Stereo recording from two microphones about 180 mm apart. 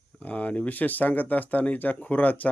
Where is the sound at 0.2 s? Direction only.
10° left (ahead or behind).